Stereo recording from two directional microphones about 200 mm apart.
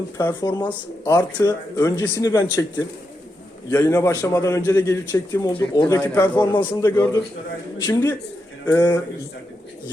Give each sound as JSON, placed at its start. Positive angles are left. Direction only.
{"t": 0.2, "sound": "a man's voice", "side_deg": 15}
{"t": 3.7, "sound": "a man's voice", "side_deg": 15}
{"t": 6.8, "sound": "a man's voice", "side_deg": 10}